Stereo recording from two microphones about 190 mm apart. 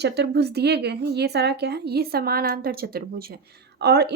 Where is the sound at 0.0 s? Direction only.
60° right (ahead or behind).